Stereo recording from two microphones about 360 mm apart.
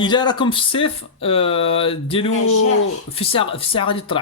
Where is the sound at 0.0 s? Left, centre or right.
Centre.